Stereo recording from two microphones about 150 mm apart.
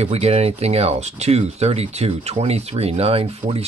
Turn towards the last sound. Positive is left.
turn(degrees=-40)  # may be behind; listen again after turning